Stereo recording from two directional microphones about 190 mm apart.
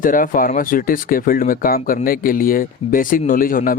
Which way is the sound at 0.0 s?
45° left (ahead or behind).